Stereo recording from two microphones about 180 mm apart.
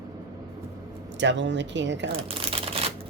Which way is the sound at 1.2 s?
85° right.